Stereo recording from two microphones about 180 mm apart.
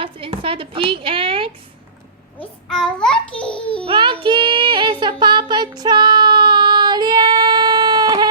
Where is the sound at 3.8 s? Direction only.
25° right (ahead or behind).